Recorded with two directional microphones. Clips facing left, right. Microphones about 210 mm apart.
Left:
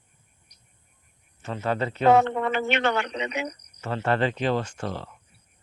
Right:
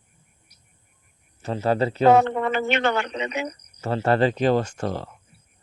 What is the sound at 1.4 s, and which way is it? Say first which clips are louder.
Speech: right 5 dB; 35° right (ahead or behind).